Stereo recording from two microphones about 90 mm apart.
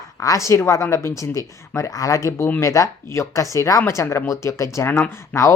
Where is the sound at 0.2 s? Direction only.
35° left (ahead or behind).